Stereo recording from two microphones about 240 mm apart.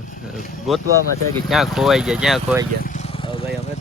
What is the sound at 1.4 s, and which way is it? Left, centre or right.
Speech, centre.